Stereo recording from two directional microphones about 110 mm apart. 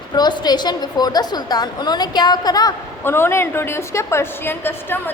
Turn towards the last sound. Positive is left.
turn(degrees=20)  # may be behind; listen again after turning